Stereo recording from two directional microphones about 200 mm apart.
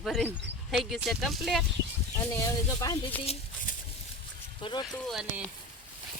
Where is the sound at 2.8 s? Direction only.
10° left (ahead or behind).